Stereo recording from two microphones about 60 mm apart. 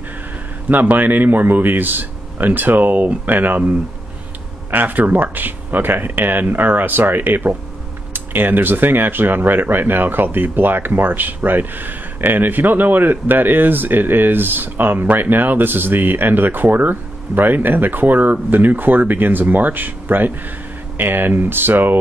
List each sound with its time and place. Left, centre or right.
0.7 s speech: right